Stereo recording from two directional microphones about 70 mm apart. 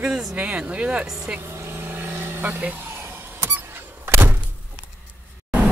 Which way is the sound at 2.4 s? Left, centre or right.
Right.